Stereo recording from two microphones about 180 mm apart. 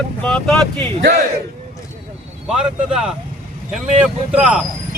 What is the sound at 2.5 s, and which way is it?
Speech, 5° right (ahead or behind).